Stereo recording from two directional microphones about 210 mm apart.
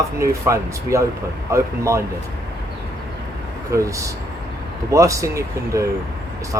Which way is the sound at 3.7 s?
15° right (ahead or behind).